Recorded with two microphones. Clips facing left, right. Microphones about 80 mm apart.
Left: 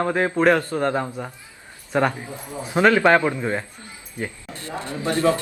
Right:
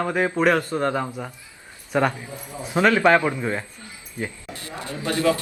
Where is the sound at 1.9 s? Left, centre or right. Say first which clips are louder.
Left 1 dB; centre.